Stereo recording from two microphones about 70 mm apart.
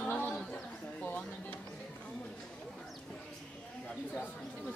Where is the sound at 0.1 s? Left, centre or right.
Left.